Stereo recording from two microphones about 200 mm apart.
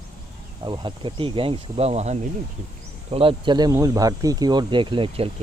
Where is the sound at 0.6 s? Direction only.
25° right (ahead or behind).